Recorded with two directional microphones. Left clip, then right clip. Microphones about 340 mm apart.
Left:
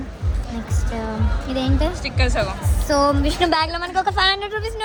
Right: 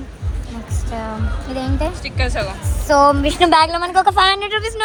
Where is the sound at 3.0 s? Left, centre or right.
Centre.